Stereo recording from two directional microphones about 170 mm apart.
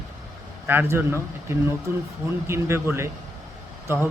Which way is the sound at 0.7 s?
15° right (ahead or behind).